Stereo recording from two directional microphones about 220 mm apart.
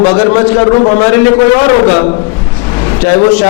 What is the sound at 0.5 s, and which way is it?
Speech, 15° left (ahead or behind).